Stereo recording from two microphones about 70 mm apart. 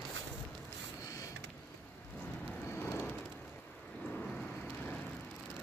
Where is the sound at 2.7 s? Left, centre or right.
Left.